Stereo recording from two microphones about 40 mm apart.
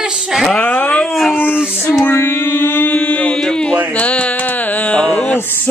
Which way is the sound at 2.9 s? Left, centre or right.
Left.